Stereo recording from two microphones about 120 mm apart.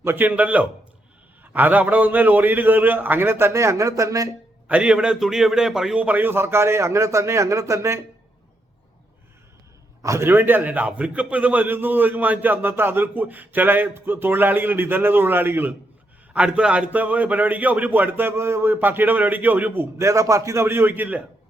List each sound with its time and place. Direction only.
0.0 s a man's voice: 15° right (ahead or behind)
4.7 s a man's voice: 10° right (ahead or behind)
10.0 s a man's voice: 25° right (ahead or behind)